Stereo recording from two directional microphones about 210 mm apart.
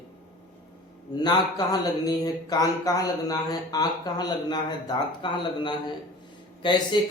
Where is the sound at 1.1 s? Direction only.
20° left (ahead or behind).